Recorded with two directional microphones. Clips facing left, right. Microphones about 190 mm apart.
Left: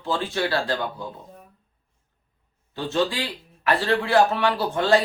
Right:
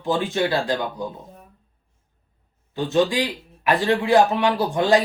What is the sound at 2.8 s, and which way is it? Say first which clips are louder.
Speech: right 4 dB; 15° right (ahead or behind).